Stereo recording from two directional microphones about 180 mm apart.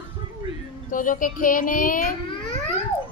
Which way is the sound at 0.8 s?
50° left (ahead or behind).